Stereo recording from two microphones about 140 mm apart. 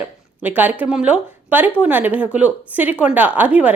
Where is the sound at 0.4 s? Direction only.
10° right (ahead or behind).